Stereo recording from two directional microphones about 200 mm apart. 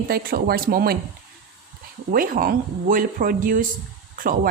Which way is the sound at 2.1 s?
45° right (ahead or behind).